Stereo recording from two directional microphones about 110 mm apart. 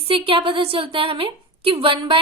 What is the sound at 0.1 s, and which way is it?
A woman's voice, 55° right (ahead or behind).